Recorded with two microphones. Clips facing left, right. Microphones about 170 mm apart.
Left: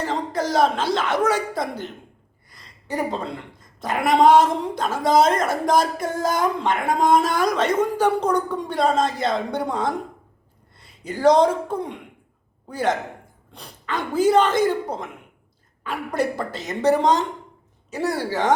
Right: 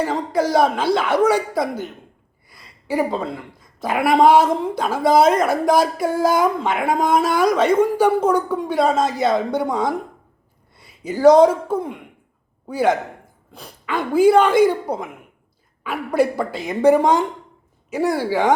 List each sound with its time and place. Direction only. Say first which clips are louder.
0.0 s a woman's voice: right 4 dB; 10° right (ahead or behind)
2.5 s a sound: right 5 dB; 5° right (ahead or behind)
3.8 s a woman's voice: right 2 dB; 10° right (ahead or behind)